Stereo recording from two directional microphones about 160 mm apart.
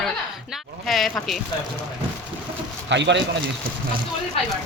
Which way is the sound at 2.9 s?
90° right.